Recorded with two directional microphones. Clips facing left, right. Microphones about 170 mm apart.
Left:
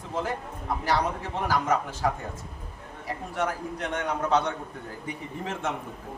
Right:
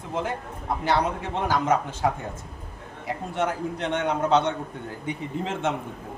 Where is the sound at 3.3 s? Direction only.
25° right (ahead or behind).